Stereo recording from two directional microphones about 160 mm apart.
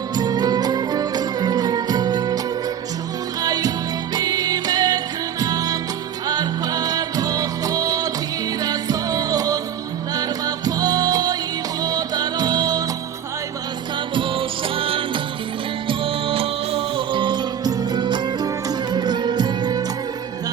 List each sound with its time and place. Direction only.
0.1 s music: 25° right (ahead or behind)
3.4 s music: 25° right (ahead or behind)
14.1 s music: 30° right (ahead or behind)